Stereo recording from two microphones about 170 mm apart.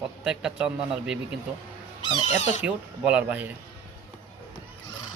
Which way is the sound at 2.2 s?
40° left (ahead or behind).